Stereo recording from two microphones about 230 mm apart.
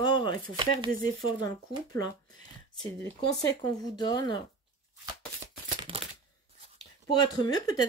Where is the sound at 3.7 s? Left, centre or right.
Centre.